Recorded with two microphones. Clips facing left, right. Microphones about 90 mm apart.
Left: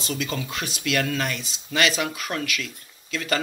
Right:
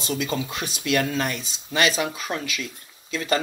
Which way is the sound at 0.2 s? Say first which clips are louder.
Right 2 dB; 25° right (ahead or behind).